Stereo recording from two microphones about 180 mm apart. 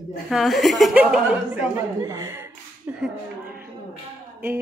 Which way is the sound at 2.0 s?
15° right (ahead or behind).